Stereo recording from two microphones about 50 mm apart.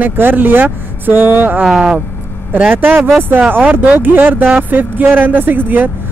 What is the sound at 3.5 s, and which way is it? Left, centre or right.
A woman's voice, right.